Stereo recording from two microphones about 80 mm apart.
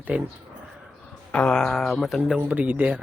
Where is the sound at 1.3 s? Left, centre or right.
Centre.